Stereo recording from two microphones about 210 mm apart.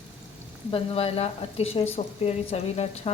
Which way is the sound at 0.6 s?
25° left (ahead or behind).